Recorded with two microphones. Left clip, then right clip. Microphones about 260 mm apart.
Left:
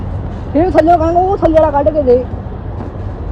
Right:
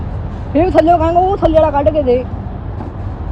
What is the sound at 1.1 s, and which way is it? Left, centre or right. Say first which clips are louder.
Speech: even; centre.